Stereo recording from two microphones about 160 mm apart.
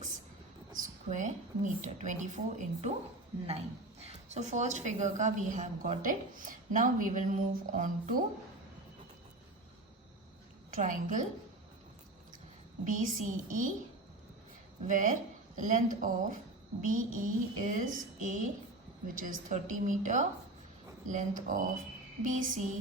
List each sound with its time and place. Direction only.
0.8 s a woman's voice: 50° right (ahead or behind)
4.0 s a woman's voice: 45° right (ahead or behind)
10.8 s a woman's voice: 55° right (ahead or behind)
12.8 s speech: 55° right (ahead or behind)
14.8 s a woman's voice: 55° right (ahead or behind)